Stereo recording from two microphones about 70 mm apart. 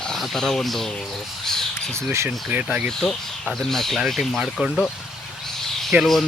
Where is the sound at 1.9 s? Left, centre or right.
Right.